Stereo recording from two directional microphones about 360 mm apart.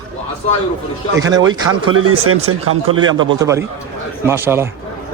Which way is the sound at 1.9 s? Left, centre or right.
Right.